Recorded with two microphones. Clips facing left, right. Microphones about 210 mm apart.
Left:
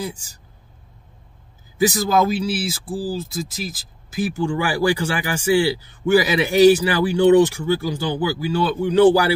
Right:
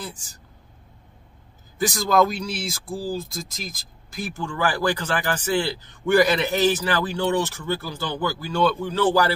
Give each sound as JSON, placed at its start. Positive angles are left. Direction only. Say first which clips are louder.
{"t": 0.0, "sound": "speech", "louder": "left 7 dB", "side_deg": 10}
{"t": 1.8, "sound": "speech", "louder": "left 2 dB", "side_deg": 5}